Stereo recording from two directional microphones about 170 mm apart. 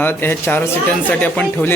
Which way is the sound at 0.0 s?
10° left (ahead or behind).